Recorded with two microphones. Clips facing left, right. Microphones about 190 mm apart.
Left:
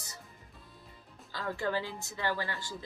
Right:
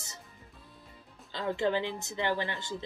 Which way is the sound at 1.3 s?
20° right (ahead or behind).